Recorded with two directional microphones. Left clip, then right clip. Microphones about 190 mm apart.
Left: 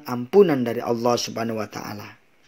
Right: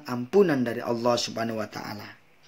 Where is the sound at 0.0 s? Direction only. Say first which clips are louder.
Left 5 dB; 20° left (ahead or behind).